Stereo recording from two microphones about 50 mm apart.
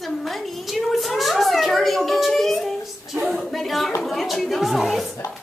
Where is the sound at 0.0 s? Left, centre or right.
Centre.